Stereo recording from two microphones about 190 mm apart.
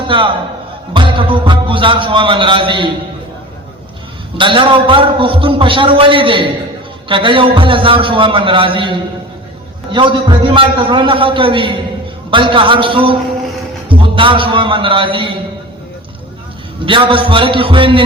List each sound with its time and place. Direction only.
0.9 s a man's voice: 25° right (ahead or behind)
4.4 s a man's voice: 25° right (ahead or behind)
16.8 s a man's voice: 25° right (ahead or behind)